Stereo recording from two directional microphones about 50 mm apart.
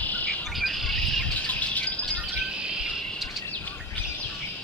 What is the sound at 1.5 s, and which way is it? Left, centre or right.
Bird, left.